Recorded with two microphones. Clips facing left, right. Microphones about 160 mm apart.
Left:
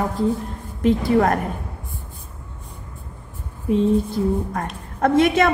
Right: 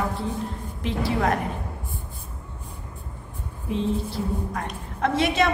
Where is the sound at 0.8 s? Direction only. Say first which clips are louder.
Left 8 dB; 50° left (ahead or behind).